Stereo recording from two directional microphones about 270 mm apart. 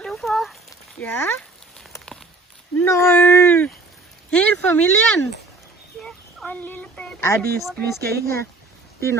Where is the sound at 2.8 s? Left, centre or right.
Centre.